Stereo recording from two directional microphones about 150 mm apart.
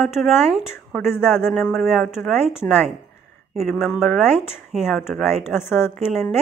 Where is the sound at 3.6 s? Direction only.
Centre (ahead or behind).